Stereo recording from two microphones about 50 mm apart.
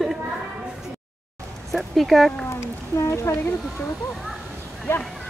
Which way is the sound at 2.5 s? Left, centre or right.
Left.